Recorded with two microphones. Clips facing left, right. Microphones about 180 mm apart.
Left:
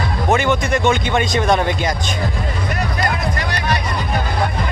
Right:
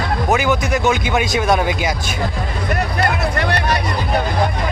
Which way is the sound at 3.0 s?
60° right (ahead or behind).